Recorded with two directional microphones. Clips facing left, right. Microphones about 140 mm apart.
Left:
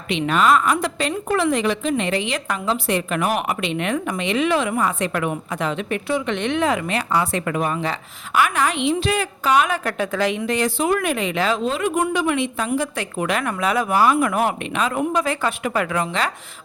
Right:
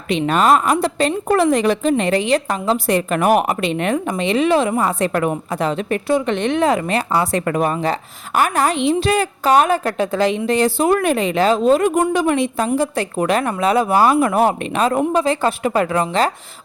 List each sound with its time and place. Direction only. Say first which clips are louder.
0.1 s a woman's voice: right 3 dB; 40° right (ahead or behind)
3.9 s a woman's voice: right 4 dB; 25° right (ahead or behind)